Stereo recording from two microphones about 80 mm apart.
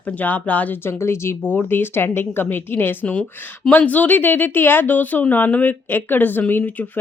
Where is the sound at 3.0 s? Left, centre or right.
Centre.